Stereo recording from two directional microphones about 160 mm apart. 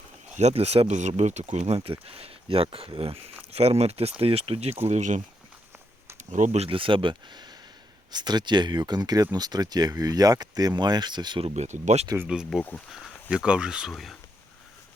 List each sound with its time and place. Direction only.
0.3 s speech: 45° right (ahead or behind)
4.9 s speech: 50° right (ahead or behind)
6.3 s speech: 45° right (ahead or behind)
12.0 s speech: 15° right (ahead or behind)
12.3 s speech: 5° right (ahead or behind)